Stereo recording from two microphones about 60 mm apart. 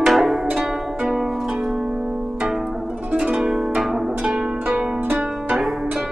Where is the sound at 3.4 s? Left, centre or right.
Centre.